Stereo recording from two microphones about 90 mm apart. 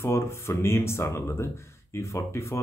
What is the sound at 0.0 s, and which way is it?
Speech, 30° left (ahead or behind).